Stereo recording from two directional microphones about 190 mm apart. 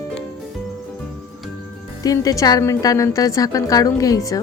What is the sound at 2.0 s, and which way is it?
A woman's voice, 20° left (ahead or behind).